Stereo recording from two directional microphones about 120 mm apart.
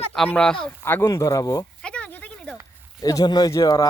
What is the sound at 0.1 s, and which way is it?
Speech, 10° left (ahead or behind).